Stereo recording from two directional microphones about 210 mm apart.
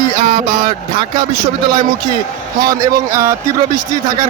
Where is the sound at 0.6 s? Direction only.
20° right (ahead or behind).